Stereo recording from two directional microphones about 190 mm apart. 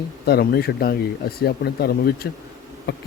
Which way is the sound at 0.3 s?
55° left (ahead or behind).